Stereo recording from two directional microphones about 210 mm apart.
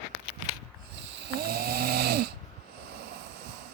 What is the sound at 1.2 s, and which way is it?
Snoring, 50° right (ahead or behind).